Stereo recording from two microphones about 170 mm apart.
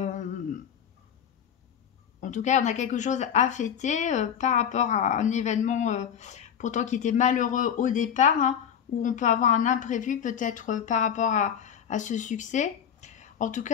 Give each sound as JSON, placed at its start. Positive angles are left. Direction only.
{"t": 0.0, "sound": "humming", "side_deg": 45}
{"t": 2.1, "sound": "a woman's voice", "side_deg": 45}